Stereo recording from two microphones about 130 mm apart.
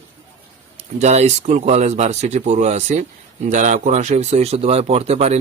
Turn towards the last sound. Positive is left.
turn(degrees=-55)  # may be behind; listen again after turning